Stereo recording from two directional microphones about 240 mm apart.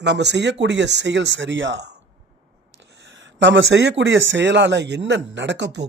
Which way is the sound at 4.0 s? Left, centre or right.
Right.